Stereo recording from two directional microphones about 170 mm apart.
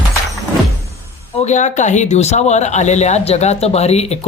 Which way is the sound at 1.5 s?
45° left (ahead or behind).